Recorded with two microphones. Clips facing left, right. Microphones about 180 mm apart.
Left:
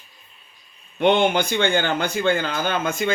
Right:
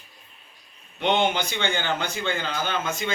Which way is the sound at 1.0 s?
55° left (ahead or behind).